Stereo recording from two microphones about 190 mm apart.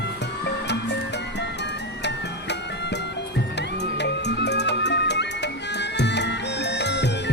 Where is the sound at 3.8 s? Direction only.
65° left (ahead or behind).